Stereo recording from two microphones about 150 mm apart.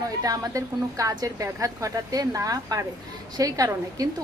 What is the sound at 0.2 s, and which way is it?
A woman's voice, 25° right (ahead or behind).